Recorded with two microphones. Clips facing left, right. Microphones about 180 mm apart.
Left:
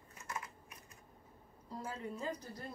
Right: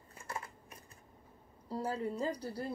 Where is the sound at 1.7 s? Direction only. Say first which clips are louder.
Right 7 dB; 35° right (ahead or behind).